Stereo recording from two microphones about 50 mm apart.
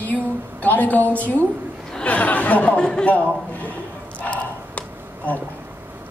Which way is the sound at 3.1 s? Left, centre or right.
Left.